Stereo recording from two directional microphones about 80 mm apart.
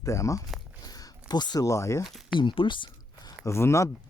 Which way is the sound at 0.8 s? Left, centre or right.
Left.